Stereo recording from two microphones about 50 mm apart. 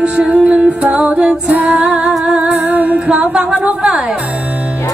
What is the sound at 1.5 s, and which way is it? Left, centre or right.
Music, right.